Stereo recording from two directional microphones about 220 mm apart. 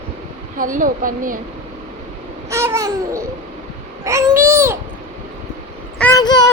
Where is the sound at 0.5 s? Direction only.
35° right (ahead or behind).